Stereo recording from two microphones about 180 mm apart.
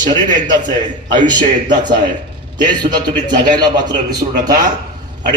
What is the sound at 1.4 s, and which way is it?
Speech, 45° right (ahead or behind).